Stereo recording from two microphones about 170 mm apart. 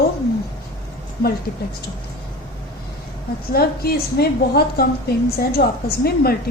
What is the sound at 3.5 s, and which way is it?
A woman's voice, 65° left (ahead or behind).